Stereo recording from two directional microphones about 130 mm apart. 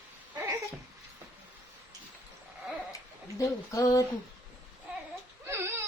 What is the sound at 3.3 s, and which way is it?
Speech, 25° left (ahead or behind).